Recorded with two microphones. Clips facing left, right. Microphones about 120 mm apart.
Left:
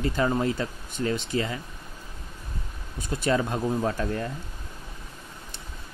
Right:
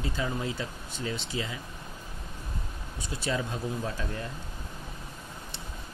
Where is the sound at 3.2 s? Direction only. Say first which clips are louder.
Left 7 dB; 55° left (ahead or behind).